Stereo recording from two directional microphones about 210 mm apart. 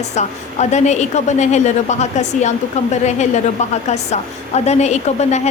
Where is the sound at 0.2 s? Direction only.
35° left (ahead or behind).